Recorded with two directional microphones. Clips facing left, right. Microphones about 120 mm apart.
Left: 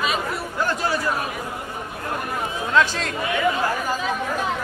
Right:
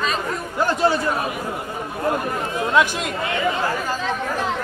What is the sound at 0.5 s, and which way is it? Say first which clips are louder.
Speech: right 5 dB; 25° right (ahead or behind).